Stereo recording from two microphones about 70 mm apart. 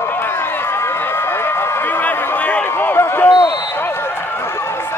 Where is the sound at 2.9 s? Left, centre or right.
Left.